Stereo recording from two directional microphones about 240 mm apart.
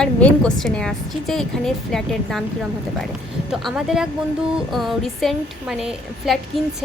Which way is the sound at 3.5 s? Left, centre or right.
Centre.